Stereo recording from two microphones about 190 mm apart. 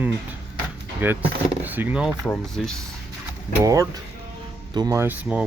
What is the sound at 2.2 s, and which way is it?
Speech, 5° left (ahead or behind).